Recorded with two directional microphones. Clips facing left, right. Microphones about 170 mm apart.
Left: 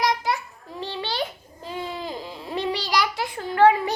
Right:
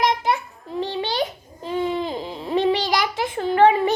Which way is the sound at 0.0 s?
25° right (ahead or behind).